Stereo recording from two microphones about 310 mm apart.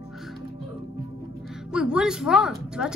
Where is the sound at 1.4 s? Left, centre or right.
Centre.